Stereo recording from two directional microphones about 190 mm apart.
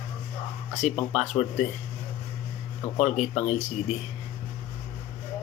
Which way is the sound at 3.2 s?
35° left (ahead or behind).